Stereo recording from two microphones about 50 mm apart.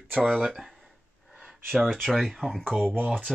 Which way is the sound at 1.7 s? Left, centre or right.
Centre.